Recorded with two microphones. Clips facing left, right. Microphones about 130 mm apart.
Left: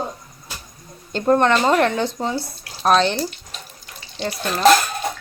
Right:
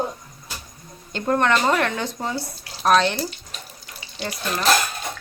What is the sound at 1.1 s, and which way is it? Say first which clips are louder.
Speech: left 4 dB; 30° left (ahead or behind).